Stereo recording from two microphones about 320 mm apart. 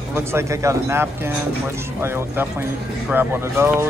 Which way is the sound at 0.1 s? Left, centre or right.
Centre.